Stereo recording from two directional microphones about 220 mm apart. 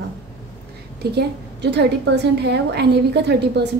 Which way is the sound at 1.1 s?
50° right (ahead or behind).